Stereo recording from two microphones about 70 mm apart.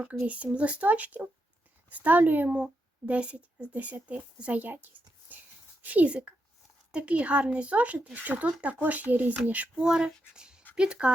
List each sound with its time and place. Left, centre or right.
0.3 s speech: centre